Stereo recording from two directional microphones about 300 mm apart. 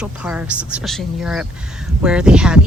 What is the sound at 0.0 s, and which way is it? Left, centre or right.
Speech, centre.